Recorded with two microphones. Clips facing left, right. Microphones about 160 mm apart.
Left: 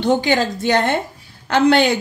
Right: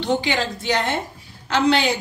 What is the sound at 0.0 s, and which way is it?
A woman's voice, 50° left (ahead or behind).